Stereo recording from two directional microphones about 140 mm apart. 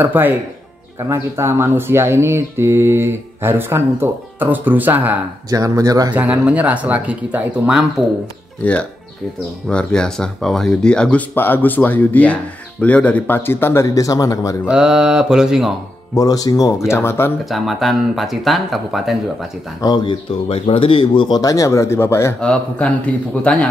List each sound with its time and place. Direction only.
0.0 s speech: 15° right (ahead or behind)
5.5 s speech: 25° right (ahead or behind)
6.1 s speech: 10° right (ahead or behind)
8.6 s speech: 10° left (ahead or behind)
14.7 s speech: 5° right (ahead or behind)
16.2 s speech: 25° left (ahead or behind)
17.5 s speech: centre (ahead or behind)
19.8 s speech: 30° left (ahead or behind)
22.4 s speech: 5° left (ahead or behind)